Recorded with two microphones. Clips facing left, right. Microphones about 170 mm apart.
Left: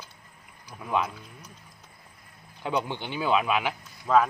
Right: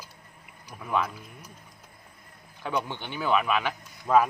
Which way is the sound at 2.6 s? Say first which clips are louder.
Left 2 dB; 15° left (ahead or behind).